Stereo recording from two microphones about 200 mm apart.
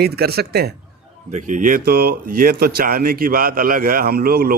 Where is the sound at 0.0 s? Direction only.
50° right (ahead or behind).